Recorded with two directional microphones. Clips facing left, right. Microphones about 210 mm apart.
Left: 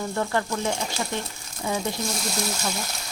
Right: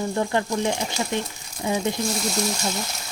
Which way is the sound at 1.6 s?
15° right (ahead or behind).